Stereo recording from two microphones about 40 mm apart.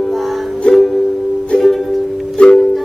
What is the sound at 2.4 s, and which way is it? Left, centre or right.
Music, left.